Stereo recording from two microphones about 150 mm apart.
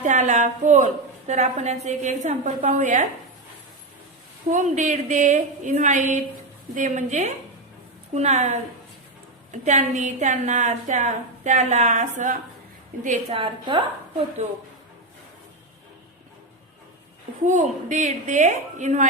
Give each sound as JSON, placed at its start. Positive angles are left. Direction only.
{"t": 0.0, "sound": "a woman's voice", "side_deg": -55}
{"t": 4.4, "sound": "a woman's voice", "side_deg": -55}
{"t": 13.3, "sound": "a woman's voice", "side_deg": -35}
{"t": 17.4, "sound": "a woman's voice", "side_deg": -55}